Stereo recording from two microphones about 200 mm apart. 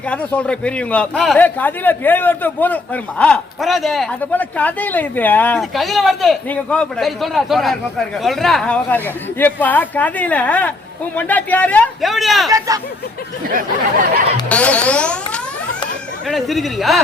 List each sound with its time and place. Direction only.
0.1 s a man's voice: 5° left (ahead or behind)
12.5 s speech: 15° right (ahead or behind)
14.5 s a man's voice: 5° left (ahead or behind)
16.3 s a man's voice: centre (ahead or behind)